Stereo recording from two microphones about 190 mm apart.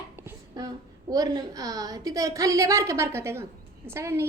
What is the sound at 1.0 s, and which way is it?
A woman's voice, 20° right (ahead or behind).